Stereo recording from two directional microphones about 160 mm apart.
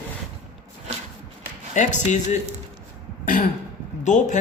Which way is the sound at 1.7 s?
50° left (ahead or behind).